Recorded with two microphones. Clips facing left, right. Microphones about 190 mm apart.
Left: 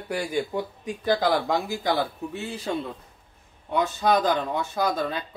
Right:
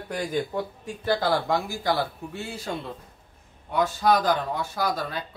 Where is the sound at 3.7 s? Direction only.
20° left (ahead or behind).